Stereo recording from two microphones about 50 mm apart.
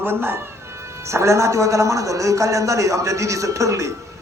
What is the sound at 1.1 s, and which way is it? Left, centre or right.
A man's voice, right.